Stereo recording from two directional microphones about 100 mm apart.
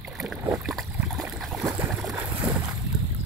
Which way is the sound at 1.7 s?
20° right (ahead or behind).